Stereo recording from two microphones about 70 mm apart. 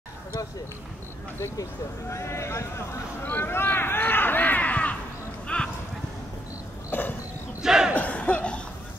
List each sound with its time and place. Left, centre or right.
2.0 s speech: left
3.3 s a sound: left
5.5 s clip-clop: centre
6.9 s a sound: left
7.6 s battle cry: centre
7.9 s battle cry: left